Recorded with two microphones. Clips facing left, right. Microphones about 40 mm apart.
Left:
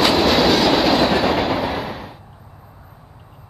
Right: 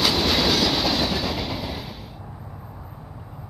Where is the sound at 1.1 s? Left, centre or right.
Left.